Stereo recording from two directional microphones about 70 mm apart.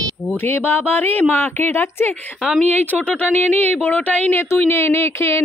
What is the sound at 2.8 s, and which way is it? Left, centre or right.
Speech, left.